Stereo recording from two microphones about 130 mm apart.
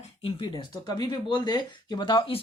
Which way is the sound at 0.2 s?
40° left (ahead or behind).